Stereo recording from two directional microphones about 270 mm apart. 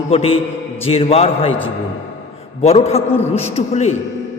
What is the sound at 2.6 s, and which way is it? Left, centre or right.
A man's voice, left.